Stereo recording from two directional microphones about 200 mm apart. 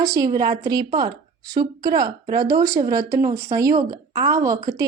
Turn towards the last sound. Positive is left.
turn(degrees=-15)  # may be behind; listen again after turning